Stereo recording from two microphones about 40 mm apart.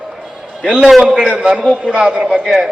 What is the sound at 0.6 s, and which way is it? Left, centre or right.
A man's voice, centre.